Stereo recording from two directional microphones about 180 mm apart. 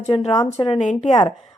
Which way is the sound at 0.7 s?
40° left (ahead or behind).